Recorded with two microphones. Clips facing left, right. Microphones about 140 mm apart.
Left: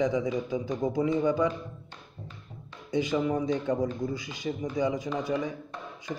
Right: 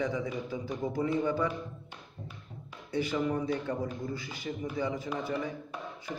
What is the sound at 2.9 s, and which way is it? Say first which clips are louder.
A man's voice: left 3 dB; 15° left (ahead or behind).